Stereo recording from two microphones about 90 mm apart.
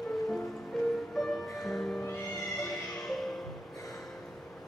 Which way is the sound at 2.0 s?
25° left (ahead or behind).